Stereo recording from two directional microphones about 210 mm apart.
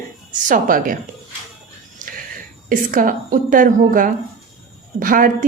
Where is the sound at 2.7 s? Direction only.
40° right (ahead or behind).